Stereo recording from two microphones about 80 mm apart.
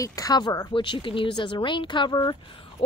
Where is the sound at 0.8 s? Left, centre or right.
Left.